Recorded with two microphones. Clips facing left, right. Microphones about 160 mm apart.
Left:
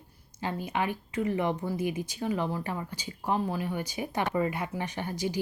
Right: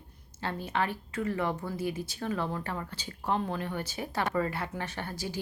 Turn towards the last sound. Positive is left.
turn(degrees=15)  # may be behind; listen again after turning